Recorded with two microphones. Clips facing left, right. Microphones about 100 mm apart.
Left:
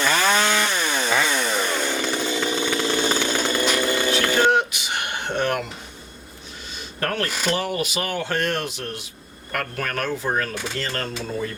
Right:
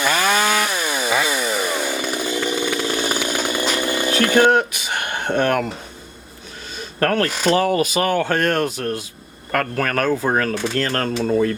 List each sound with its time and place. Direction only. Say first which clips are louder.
0.0 s chainsaw: right 2 dB; 10° right (ahead or behind)
4.5 s a sound: right 3 dB; 45° right (ahead or behind)
6.7 s speech: right 7 dB; 55° right (ahead or behind)
9.7 s speech: right 7 dB; 60° right (ahead or behind)